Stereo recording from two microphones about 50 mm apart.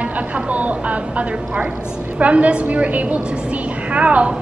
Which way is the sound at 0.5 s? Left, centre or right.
Right.